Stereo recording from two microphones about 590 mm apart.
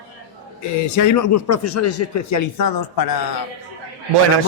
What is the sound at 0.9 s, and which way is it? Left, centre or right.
A man's voice, left.